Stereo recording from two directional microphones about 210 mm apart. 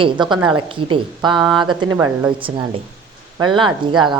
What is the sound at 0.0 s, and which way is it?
Speech, 20° right (ahead or behind).